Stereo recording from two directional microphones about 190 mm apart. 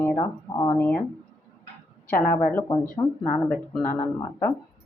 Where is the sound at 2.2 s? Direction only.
10° left (ahead or behind).